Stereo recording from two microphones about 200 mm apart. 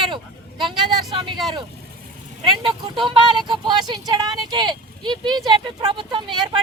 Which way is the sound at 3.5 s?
20° right (ahead or behind).